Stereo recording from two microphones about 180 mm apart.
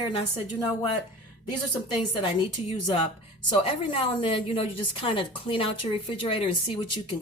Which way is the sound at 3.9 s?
30° left (ahead or behind).